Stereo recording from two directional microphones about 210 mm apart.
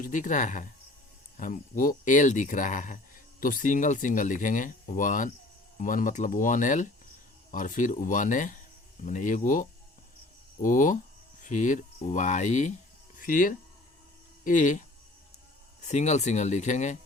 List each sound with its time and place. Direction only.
0.0 s speech: 35° left (ahead or behind)